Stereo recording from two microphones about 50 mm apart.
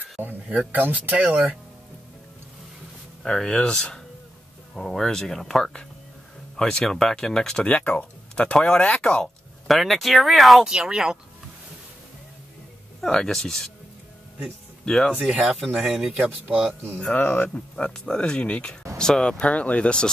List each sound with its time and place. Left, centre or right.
0.2 s speech: right
3.3 s speech: centre
7.6 s speech: left
7.9 s speech: centre
9.7 s speech: centre
10.6 s speech: centre
13.0 s speech: centre
14.9 s speech: centre
15.8 s speech: centre
16.4 s speech: right
17.1 s speech: left
17.6 s speech: left
19.4 s speech: left